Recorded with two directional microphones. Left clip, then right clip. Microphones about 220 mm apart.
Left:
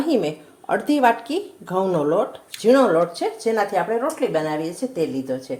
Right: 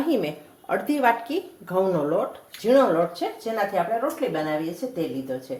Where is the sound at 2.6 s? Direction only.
35° left (ahead or behind).